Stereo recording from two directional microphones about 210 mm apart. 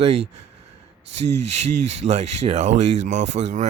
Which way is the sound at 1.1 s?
30° right (ahead or behind).